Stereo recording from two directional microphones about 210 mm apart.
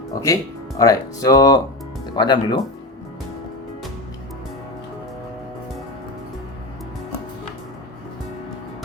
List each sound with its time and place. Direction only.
0.1 s speech: 15° left (ahead or behind)